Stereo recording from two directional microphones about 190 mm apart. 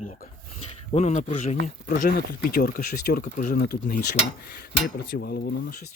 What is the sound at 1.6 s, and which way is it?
Speech, 45° left (ahead or behind).